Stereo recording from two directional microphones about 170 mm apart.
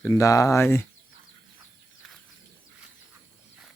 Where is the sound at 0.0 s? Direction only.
15° left (ahead or behind).